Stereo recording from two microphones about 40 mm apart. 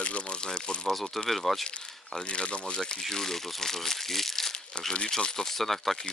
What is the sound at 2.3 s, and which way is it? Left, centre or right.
Speech, left.